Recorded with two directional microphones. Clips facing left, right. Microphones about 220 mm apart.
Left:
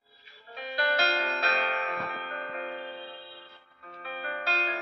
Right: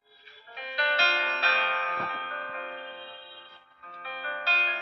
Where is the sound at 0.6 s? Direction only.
20° right (ahead or behind); by 2.4 s 35° right (ahead or behind).